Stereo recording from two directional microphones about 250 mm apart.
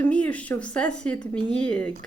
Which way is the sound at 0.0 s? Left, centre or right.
Centre.